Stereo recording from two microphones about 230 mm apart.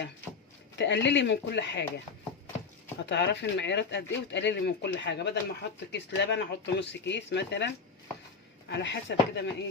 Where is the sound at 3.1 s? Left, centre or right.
Left.